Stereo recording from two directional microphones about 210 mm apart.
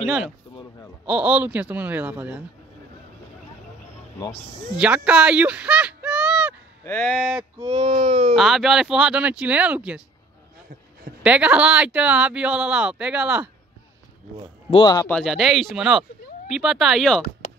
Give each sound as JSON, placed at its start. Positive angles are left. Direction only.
{"t": 0.0, "sound": "speech", "side_deg": -5}
{"t": 4.7, "sound": "speech", "side_deg": -5}
{"t": 6.8, "sound": "speech", "side_deg": 5}
{"t": 7.5, "sound": "speech", "side_deg": -20}
{"t": 8.4, "sound": "speech", "side_deg": 0}
{"t": 11.2, "sound": "speech", "side_deg": -5}
{"t": 14.7, "sound": "speech", "side_deg": 20}
{"t": 15.0, "sound": "speech", "side_deg": 0}